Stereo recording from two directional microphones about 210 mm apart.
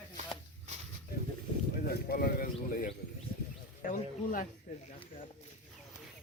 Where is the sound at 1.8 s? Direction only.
45° left (ahead or behind).